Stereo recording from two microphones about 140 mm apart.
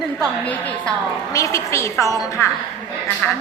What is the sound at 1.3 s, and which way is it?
A woman's voice, 20° left (ahead or behind).